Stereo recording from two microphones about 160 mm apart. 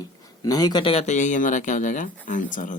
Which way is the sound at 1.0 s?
50° left (ahead or behind).